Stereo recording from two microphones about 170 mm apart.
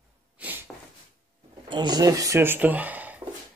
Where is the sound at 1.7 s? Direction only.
25° right (ahead or behind); by 3.2 s 10° right (ahead or behind).